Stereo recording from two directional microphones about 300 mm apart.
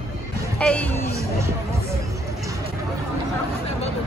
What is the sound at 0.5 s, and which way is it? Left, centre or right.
Speech, centre.